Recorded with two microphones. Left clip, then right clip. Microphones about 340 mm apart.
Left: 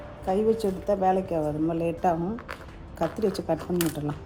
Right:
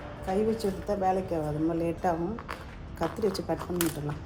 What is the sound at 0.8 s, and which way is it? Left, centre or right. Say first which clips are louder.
A woman's voice: left 4 dB; left.